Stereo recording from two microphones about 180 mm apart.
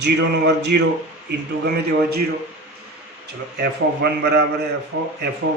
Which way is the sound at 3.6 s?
65° right (ahead or behind).